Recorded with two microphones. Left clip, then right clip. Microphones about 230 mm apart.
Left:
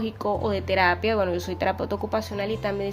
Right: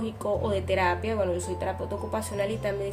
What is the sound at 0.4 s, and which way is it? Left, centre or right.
Speech, left.